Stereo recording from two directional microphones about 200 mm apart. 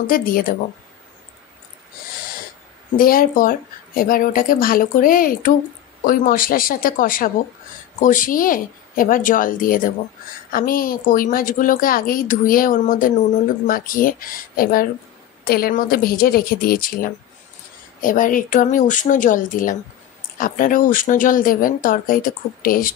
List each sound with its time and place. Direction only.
0.0 s a woman's voice: 45° left (ahead or behind)
3.0 s a woman's voice: 45° left (ahead or behind)